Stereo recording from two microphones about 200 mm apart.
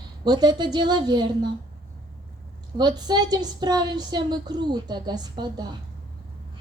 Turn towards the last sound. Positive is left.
turn(degrees=-20)  # may be behind; listen again after turning